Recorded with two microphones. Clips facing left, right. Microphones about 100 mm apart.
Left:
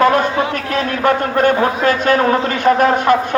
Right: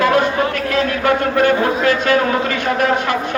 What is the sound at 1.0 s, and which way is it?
A man's voice, 40° left (ahead or behind).